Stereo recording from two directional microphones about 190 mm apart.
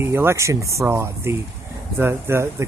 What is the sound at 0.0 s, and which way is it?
Speech, 15° right (ahead or behind).